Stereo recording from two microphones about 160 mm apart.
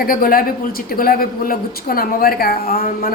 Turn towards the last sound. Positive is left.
turn(degrees=65)  # may be behind; listen again after turning